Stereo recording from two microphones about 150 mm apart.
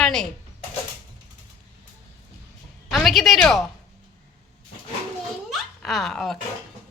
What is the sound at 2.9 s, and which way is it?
Speech, centre (ahead or behind).